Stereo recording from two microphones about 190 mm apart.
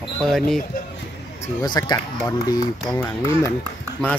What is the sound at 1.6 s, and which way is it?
Speech, 25° left (ahead or behind).